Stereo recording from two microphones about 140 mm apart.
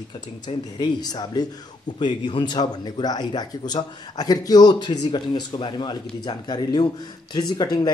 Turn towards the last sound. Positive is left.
turn(degrees=30)  # may be behind; listen again after turning